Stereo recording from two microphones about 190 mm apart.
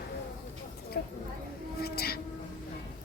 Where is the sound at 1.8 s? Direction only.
55° left (ahead or behind).